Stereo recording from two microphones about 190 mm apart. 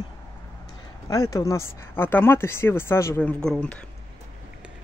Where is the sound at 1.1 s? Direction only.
20° left (ahead or behind).